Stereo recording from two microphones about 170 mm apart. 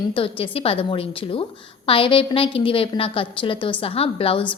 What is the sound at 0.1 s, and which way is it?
A woman's voice, 30° left (ahead or behind).